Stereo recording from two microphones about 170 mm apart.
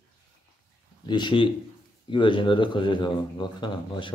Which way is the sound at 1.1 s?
25° left (ahead or behind).